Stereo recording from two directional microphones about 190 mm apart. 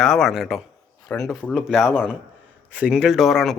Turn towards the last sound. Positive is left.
turn(degrees=0)  # may be behind; listen again after turning